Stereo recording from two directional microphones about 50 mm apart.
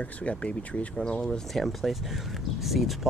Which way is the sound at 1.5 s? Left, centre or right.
Centre.